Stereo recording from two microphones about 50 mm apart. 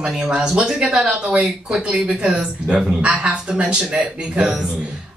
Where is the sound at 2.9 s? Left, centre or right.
Right.